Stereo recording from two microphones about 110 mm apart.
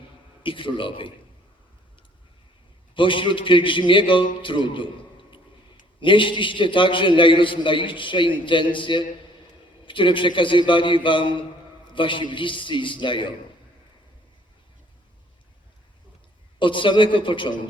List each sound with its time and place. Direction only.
0.4 s a man's voice: 50° left (ahead or behind)
2.9 s a man's voice: 50° left (ahead or behind)
6.0 s a man's voice: 50° left (ahead or behind)
16.6 s a man's voice: 50° left (ahead or behind)